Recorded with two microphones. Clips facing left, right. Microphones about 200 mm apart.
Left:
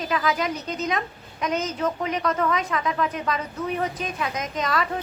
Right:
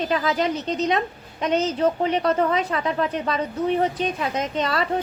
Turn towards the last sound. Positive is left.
turn(degrees=-30)  # may be behind; listen again after turning